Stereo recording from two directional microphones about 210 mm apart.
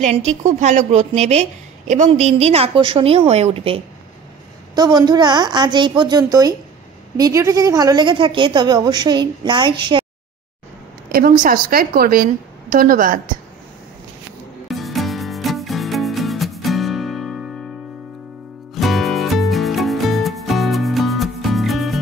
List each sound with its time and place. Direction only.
0.0 s a woman's voice: 30° right (ahead or behind)
11.1 s a woman's voice: 40° right (ahead or behind)
14.7 s music: centre (ahead or behind)
18.8 s music: centre (ahead or behind)